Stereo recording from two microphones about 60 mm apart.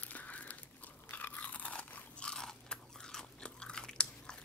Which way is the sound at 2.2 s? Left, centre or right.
Centre.